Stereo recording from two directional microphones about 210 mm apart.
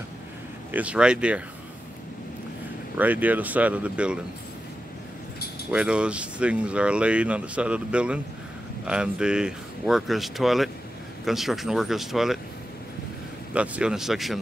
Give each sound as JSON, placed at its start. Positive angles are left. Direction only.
{"t": 0.7, "sound": "speech", "side_deg": -5}
{"t": 3.0, "sound": "speech", "side_deg": -10}
{"t": 5.7, "sound": "speech", "side_deg": -5}
{"t": 13.5, "sound": "speech", "side_deg": -5}